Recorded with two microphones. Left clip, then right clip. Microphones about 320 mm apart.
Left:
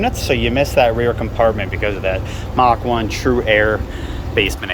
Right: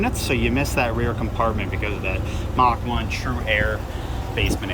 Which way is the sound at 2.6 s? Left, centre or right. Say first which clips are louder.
Left 6 dB; centre.